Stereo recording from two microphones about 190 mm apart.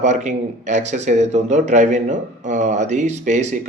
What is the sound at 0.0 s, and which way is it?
Speech, 40° right (ahead or behind).